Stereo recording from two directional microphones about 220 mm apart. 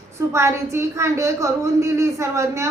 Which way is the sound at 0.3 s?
10° right (ahead or behind).